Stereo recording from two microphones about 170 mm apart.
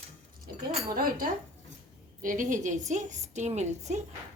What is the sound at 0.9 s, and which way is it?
A woman's voice, 60° right (ahead or behind).